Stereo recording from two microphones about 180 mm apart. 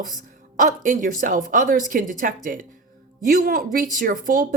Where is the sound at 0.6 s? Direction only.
45° right (ahead or behind).